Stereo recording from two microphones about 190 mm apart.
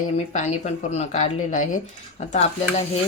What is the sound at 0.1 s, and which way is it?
Speech, 35° left (ahead or behind).